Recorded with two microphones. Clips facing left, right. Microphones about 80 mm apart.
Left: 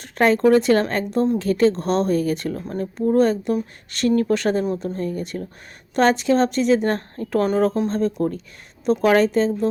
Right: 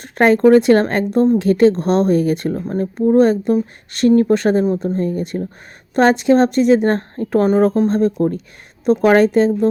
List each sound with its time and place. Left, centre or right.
0.2 s a woman's voice: right
2.5 s speech: right
4.1 s a woman's voice: right